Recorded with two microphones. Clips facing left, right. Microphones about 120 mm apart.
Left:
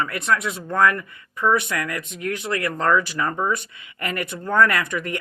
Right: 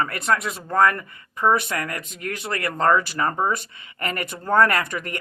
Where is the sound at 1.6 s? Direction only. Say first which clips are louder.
Left 1 dB; 40° right (ahead or behind).